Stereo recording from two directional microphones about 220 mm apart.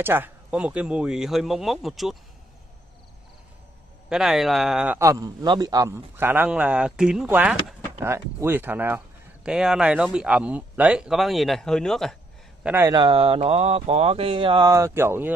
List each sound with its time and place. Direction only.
0.0 s speech: 10° right (ahead or behind)
4.1 s a man's voice: centre (ahead or behind)
12.6 s speech: 10° right (ahead or behind)